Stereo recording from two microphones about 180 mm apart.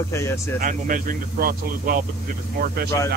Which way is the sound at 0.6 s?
50° right (ahead or behind).